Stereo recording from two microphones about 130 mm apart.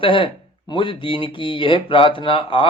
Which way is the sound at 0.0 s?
40° left (ahead or behind).